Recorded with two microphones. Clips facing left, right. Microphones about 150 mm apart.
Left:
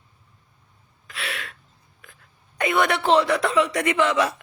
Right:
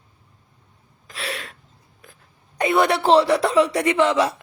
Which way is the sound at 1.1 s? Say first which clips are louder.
Right 3 dB; 40° right (ahead or behind).